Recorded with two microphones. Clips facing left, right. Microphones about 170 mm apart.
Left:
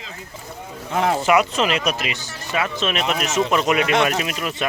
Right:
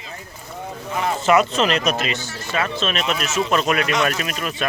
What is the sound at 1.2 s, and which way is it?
Speech, 10° left (ahead or behind).